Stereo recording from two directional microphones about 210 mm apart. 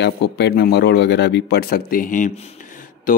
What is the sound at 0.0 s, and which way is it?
Speech, 55° left (ahead or behind).